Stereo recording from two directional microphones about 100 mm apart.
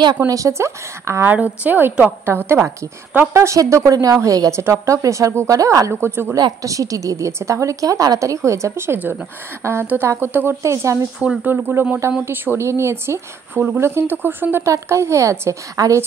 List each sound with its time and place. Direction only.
0.3 s speech: 30° right (ahead or behind)
1.3 s a woman's voice: 15° right (ahead or behind)
6.3 s a woman's voice: 35° right (ahead or behind)
11.1 s a woman's voice: 10° right (ahead or behind); by 16.0 s 35° right (ahead or behind)